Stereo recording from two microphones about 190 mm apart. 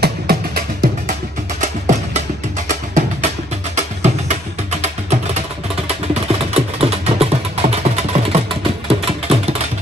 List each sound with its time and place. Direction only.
0.0 s music: 50° right (ahead or behind)
1.6 s music: 40° right (ahead or behind)
6.5 s music: 30° right (ahead or behind)